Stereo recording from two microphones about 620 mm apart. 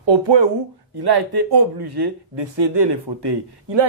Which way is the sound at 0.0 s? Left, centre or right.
Right.